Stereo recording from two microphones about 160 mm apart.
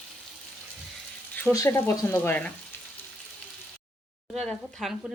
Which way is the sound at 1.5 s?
15° left (ahead or behind).